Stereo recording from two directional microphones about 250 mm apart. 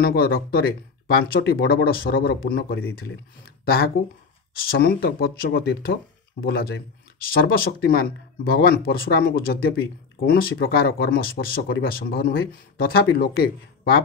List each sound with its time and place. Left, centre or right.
0.0 s speech: left